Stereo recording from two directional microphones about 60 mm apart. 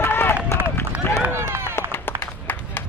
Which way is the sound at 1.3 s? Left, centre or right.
Right.